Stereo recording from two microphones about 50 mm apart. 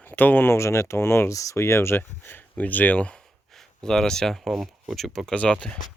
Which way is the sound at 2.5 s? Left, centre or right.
Left.